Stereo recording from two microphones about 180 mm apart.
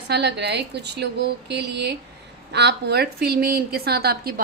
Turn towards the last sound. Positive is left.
turn(degrees=-60)  # may be behind; listen again after turning